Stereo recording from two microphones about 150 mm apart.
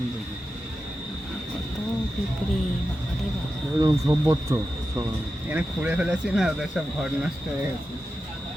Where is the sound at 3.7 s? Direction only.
25° right (ahead or behind); by 7.1 s 5° right (ahead or behind).